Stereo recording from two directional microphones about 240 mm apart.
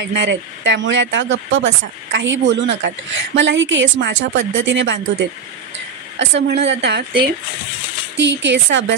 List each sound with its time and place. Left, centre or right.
0.0 s speech: right